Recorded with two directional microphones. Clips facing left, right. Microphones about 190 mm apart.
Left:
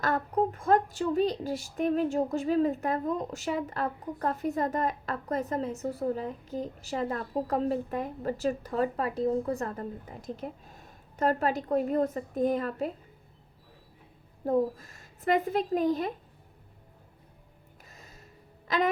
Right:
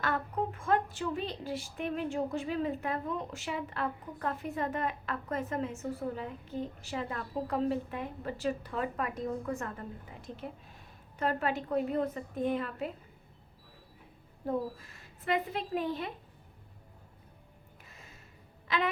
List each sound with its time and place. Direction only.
0.0 s a woman's voice: 40° left (ahead or behind)
14.4 s a woman's voice: 40° left (ahead or behind)
17.8 s music: 40° left (ahead or behind)
18.7 s a woman's voice: 40° left (ahead or behind)